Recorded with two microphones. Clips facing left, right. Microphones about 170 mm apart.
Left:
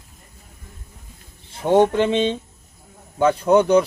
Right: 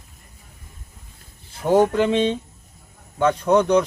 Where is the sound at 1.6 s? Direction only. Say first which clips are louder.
Left 1 dB; centre (ahead or behind).